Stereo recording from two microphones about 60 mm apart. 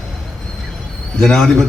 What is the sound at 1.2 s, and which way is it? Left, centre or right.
Speech, centre.